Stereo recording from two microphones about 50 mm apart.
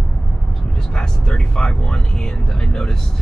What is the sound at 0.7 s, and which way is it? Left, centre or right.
Speech, centre.